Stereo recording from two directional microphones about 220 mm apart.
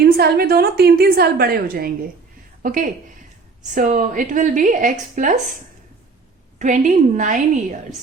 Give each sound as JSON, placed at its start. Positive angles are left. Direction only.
{"t": 0.0, "sound": "a woman's voice", "side_deg": -45}
{"t": 6.6, "sound": "a woman's voice", "side_deg": -35}